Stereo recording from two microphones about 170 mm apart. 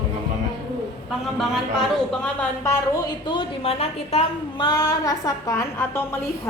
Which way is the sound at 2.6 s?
20° left (ahead or behind).